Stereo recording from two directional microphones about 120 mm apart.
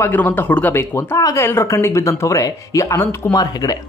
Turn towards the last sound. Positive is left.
turn(degrees=30)  # may be behind; listen again after turning